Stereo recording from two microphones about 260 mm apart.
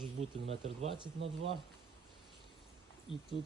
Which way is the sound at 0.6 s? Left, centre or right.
Right.